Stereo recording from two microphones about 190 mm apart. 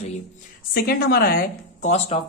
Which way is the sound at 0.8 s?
55° left (ahead or behind).